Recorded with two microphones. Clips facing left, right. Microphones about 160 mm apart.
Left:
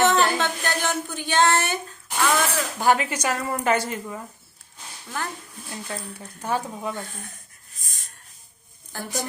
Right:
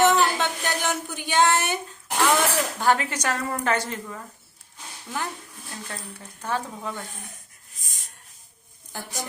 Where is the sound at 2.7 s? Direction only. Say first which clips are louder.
Left 4 dB; 10° left (ahead or behind).